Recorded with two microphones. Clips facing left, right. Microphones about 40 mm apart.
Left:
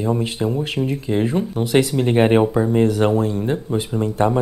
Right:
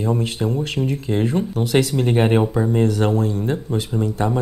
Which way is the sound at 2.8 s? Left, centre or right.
Left.